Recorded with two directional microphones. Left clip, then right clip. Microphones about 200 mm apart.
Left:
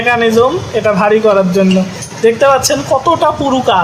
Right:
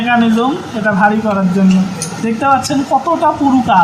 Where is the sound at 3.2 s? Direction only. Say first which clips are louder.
Left 1 dB; 55° left (ahead or behind).